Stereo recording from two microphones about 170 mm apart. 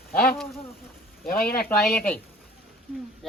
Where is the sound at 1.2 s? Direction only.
65° left (ahead or behind).